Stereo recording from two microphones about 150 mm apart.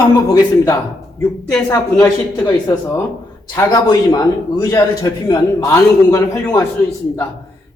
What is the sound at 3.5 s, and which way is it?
A man's voice, 25° left (ahead or behind).